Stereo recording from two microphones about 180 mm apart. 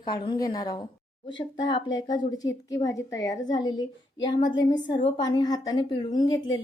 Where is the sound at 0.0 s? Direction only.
25° left (ahead or behind).